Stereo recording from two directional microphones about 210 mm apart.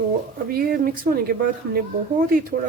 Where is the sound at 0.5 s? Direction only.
45° right (ahead or behind).